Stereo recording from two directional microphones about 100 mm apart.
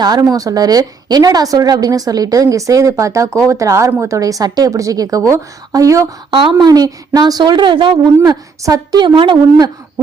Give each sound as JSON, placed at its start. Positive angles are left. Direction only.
{"t": 0.0, "sound": "a woman's voice", "side_deg": -40}
{"t": 6.3, "sound": "speech", "side_deg": -50}
{"t": 8.6, "sound": "a woman's voice", "side_deg": -35}
{"t": 9.0, "sound": "speech", "side_deg": -55}